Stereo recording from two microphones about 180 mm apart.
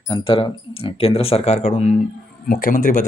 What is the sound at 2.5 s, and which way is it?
Speech, 50° left (ahead or behind).